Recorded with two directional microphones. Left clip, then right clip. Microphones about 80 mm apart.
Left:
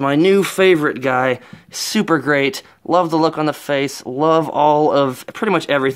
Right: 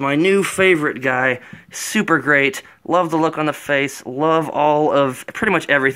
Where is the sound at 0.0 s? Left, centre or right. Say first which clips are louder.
Left 2 dB; left.